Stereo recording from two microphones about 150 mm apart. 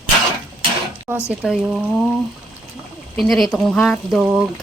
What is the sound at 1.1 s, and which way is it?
Speech, 15° right (ahead or behind).